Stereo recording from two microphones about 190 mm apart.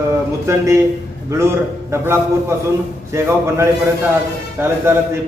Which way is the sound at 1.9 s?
15° right (ahead or behind).